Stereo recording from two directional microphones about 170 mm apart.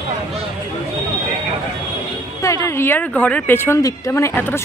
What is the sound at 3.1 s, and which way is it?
Speech, 5° left (ahead or behind).